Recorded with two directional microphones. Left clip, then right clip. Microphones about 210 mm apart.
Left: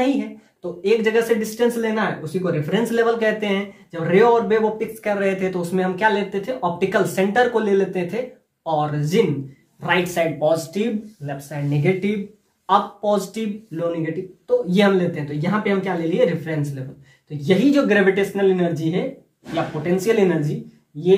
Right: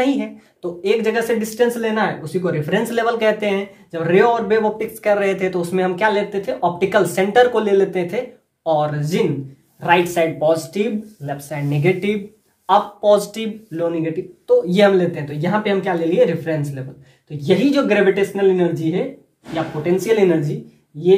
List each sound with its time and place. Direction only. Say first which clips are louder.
0.0 s speech: right 2 dB; 30° right (ahead or behind)